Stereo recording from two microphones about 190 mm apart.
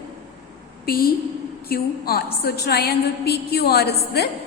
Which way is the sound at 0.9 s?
50° left (ahead or behind).